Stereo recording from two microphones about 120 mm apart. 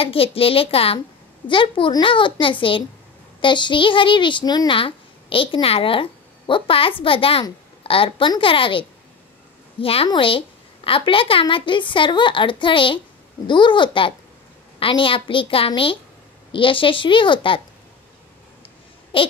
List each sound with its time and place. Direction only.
0.0 s a child's voice: 50° left (ahead or behind)
19.1 s a child's voice: 45° left (ahead or behind)